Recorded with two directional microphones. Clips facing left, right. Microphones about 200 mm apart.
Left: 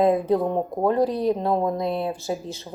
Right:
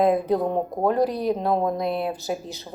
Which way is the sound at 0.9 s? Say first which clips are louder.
Left 1 dB; 30° left (ahead or behind).